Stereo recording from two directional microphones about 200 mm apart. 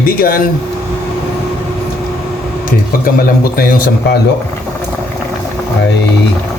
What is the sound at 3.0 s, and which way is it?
A man's voice, 45° left (ahead or behind).